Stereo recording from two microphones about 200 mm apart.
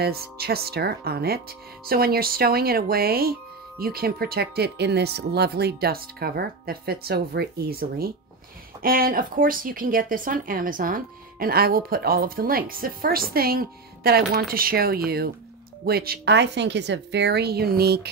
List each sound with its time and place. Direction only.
0.0 s a woman's voice: 50° right (ahead or behind)